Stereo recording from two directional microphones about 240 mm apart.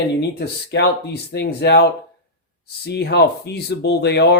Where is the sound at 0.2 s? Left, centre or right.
Left.